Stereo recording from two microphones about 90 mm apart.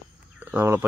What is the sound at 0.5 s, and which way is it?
Speech, 25° right (ahead or behind).